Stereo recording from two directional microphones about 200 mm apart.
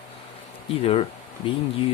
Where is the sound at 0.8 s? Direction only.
30° left (ahead or behind).